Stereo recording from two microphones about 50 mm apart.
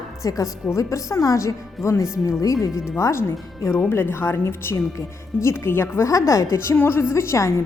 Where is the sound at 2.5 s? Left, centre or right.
Left.